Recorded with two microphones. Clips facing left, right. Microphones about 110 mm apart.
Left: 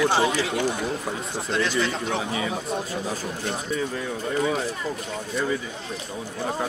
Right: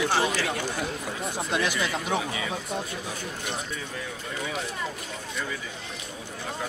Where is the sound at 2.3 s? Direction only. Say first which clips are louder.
Left 4 dB; 30° left (ahead or behind).